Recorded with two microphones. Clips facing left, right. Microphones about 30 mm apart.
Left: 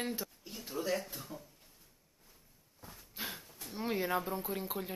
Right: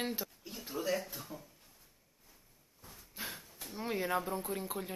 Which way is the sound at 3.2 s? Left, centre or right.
Centre.